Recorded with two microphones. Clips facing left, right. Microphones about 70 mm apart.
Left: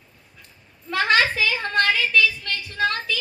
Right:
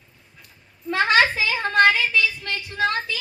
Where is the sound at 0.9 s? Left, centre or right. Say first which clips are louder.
Right 1 dB; right.